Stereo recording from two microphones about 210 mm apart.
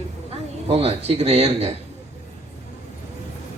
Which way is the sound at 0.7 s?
30° right (ahead or behind).